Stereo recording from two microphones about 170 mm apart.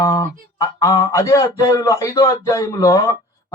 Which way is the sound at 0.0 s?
20° left (ahead or behind).